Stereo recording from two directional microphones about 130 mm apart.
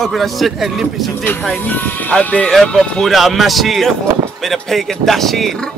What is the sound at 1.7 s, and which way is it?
Speech, 15° left (ahead or behind).